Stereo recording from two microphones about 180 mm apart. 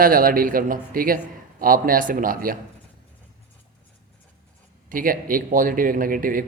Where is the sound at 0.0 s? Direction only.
50° right (ahead or behind).